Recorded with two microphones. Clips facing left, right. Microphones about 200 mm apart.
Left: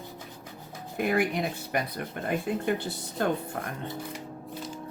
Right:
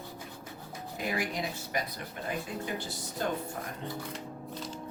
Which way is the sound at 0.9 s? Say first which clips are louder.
Left 7 dB; 60° left (ahead or behind).